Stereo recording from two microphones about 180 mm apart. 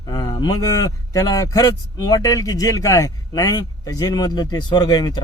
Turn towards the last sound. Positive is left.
turn(degrees=20)  # may be behind; listen again after turning